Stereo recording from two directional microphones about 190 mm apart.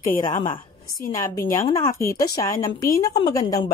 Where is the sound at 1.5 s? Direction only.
15° left (ahead or behind).